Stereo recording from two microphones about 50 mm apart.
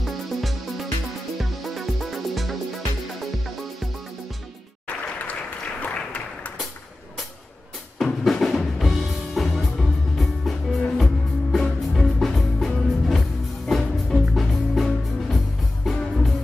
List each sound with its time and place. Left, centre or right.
0.0 s music: centre
5.2 s applause: left
8.0 s music: centre